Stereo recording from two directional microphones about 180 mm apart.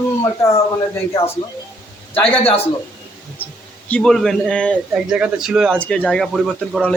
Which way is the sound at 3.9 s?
5° left (ahead or behind).